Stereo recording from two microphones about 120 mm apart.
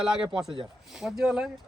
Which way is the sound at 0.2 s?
5° right (ahead or behind).